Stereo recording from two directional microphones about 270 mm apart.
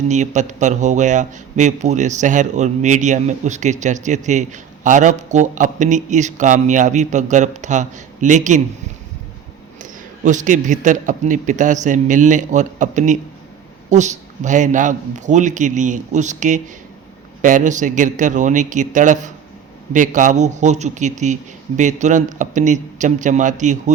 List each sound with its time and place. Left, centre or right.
0.1 s a man's voice: right
9.8 s a man's voice: right